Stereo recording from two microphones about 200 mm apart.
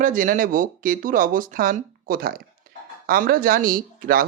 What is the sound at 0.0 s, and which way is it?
Speech, 40° right (ahead or behind).